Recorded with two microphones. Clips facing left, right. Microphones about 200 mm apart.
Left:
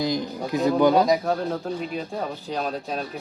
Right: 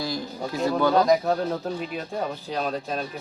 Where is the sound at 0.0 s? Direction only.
20° left (ahead or behind).